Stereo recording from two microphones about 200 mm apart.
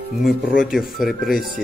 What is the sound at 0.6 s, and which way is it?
Speech, centre (ahead or behind).